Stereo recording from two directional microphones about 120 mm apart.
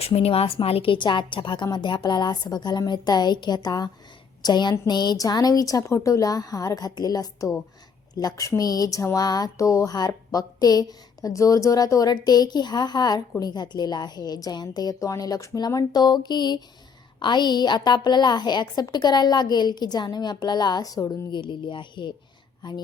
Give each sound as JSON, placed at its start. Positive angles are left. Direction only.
{"t": 0.0, "sound": "speech", "side_deg": 55}
{"t": 21.3, "sound": "speech", "side_deg": 40}